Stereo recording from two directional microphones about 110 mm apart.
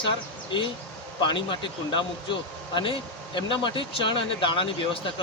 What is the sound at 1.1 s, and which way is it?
Speech, 50° left (ahead or behind).